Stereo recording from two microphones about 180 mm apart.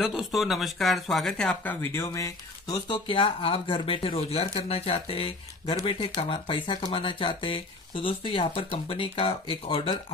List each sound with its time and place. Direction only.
0.0 s speech: centre (ahead or behind); by 9.9 s 30° left (ahead or behind)